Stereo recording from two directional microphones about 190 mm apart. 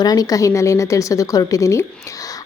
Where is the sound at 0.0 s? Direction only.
20° left (ahead or behind).